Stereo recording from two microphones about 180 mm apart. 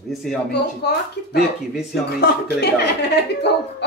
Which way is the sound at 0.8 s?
65° left (ahead or behind).